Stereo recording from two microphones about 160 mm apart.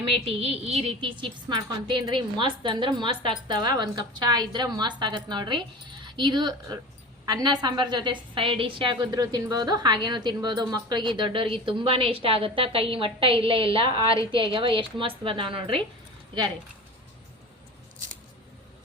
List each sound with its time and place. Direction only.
0.0 s a woman's voice: 35° right (ahead or behind)